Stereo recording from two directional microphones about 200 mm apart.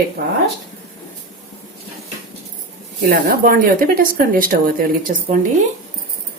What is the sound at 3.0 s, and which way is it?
Speech, 50° right (ahead or behind).